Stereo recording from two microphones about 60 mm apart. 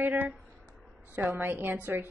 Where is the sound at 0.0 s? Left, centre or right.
Right.